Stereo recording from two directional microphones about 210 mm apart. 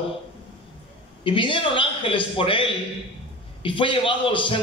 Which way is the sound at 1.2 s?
25° left (ahead or behind).